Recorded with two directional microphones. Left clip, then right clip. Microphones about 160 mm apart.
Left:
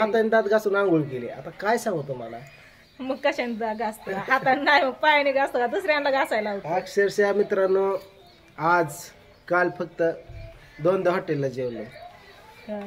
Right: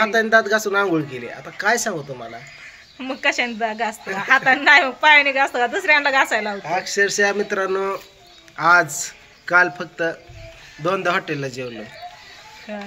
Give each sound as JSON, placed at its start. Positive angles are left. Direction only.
{"t": 0.0, "sound": "speech", "side_deg": 10}
{"t": 3.0, "sound": "a woman's voice", "side_deg": -15}
{"t": 6.6, "sound": "a man's voice", "side_deg": 10}
{"t": 12.7, "sound": "a woman's voice", "side_deg": -15}